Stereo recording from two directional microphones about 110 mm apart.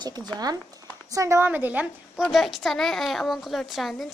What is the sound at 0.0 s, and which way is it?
A woman's voice, 40° right (ahead or behind).